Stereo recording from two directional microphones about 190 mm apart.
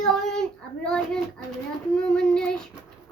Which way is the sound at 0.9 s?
5° left (ahead or behind).